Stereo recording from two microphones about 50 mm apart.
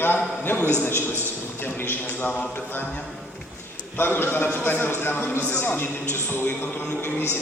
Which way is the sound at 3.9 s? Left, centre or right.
Left.